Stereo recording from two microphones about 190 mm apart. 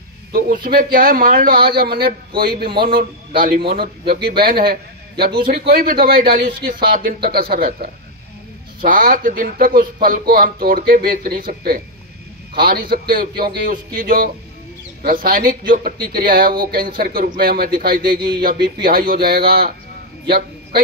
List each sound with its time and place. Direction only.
0.3 s a man's voice: 50° right (ahead or behind)